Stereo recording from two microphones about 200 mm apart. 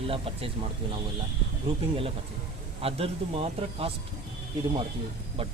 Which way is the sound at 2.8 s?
30° right (ahead or behind).